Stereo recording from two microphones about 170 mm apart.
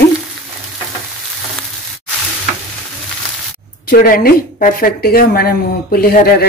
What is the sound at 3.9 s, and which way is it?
Speech, 55° left (ahead or behind).